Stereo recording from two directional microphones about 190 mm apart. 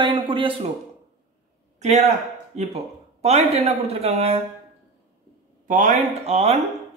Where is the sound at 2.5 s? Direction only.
35° right (ahead or behind).